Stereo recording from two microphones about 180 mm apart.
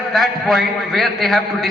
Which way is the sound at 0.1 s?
Centre (ahead or behind).